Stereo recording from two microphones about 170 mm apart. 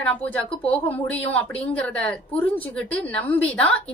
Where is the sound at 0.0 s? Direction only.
10° left (ahead or behind).